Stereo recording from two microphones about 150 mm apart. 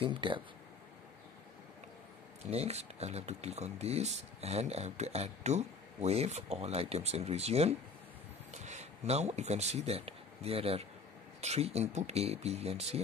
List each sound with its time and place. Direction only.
0.0 s speech: 35° right (ahead or behind)
2.5 s speech: 45° right (ahead or behind)